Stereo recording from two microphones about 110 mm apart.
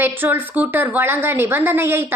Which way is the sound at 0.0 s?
20° right (ahead or behind).